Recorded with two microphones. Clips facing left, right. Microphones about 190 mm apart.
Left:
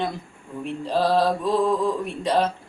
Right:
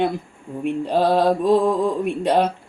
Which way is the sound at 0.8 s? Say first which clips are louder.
Right 2 dB; 55° right (ahead or behind).